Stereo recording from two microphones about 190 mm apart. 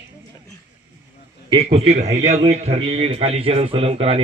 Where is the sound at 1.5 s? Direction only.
30° right (ahead or behind).